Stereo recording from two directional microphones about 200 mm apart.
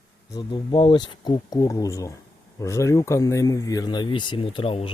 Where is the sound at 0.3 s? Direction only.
25° left (ahead or behind).